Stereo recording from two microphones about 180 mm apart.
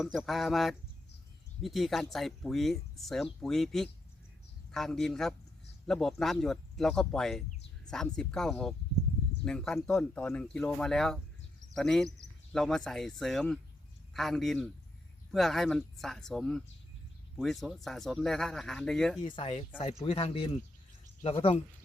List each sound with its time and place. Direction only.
0.0 s speech: centre (ahead or behind)
19.2 s speech: 30° left (ahead or behind)